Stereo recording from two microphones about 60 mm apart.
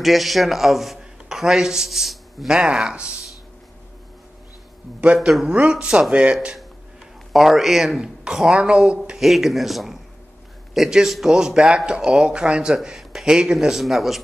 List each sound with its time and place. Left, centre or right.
0.0 s a man's voice: centre
5.0 s a man's voice: centre
7.3 s speech: centre
9.2 s speech: centre